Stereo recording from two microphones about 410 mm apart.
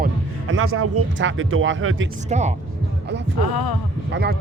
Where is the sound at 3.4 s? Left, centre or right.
Left.